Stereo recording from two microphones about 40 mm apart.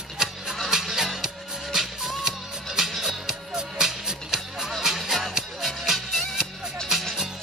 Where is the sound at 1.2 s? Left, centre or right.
Centre.